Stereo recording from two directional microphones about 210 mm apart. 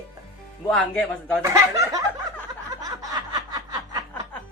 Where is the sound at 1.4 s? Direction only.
15° right (ahead or behind).